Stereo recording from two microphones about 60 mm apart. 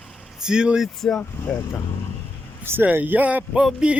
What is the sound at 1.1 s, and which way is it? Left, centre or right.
Speech, left.